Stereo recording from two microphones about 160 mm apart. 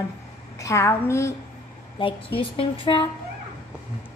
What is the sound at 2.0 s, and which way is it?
Speech, 35° left (ahead or behind).